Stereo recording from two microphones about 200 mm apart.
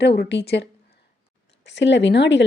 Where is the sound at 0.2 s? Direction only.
55° left (ahead or behind).